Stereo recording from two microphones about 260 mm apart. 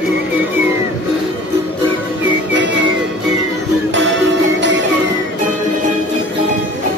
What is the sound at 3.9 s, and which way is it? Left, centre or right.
Music, right.